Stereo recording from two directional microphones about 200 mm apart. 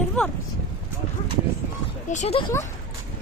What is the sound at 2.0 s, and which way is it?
Speech, 35° left (ahead or behind).